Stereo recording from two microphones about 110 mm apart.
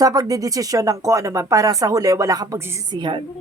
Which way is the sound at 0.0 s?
35° right (ahead or behind).